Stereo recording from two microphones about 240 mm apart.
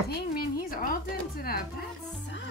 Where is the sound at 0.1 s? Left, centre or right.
Left.